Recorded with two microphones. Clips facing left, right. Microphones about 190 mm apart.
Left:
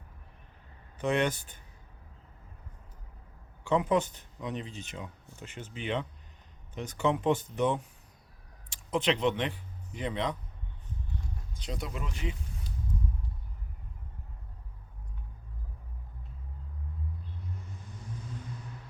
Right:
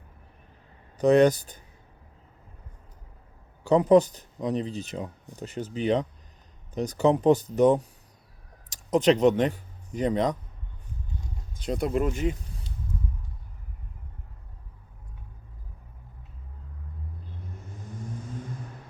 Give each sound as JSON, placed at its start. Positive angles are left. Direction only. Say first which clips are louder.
{"t": 0.9, "sound": "speech", "louder": "right 10 dB", "side_deg": -40}
{"t": 3.6, "sound": "speech", "louder": "right 9 dB", "side_deg": -40}
{"t": 11.5, "sound": "speech", "louder": "right 12 dB", "side_deg": -50}